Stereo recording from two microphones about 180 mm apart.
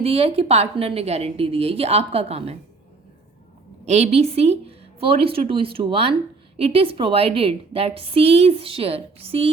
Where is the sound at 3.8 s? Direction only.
40° right (ahead or behind).